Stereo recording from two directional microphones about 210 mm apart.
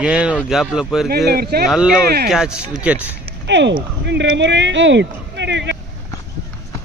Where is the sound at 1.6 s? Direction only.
Centre (ahead or behind).